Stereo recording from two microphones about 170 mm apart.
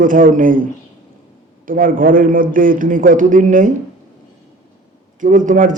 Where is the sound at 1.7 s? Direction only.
55° right (ahead or behind).